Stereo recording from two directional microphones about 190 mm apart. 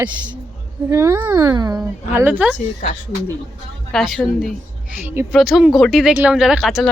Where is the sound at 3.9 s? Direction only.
Centre (ahead or behind).